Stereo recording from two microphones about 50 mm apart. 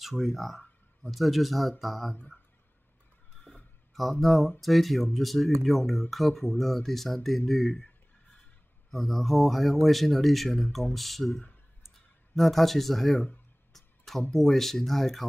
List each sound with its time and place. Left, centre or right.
0.0 s speech: centre
3.5 s a sound: left
3.9 s speech: centre
8.9 s speech: centre
12.4 s speech: centre
13.7 s a sound: centre
14.3 s speech: centre